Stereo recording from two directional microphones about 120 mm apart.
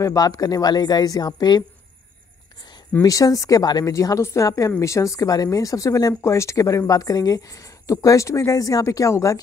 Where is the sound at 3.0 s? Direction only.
30° left (ahead or behind).